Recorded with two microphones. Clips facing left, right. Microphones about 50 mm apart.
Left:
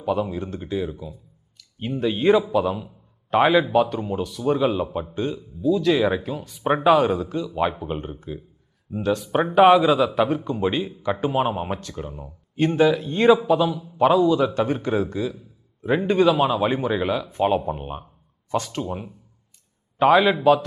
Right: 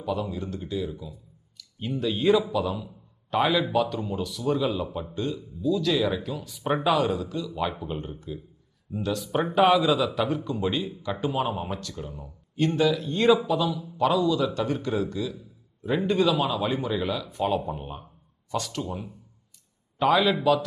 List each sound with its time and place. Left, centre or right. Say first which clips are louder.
0.0 s a man's voice: left 5 dB; left
6.0 s a man's voice: left 5 dB; left
13.5 s a man's voice: left 6 dB; left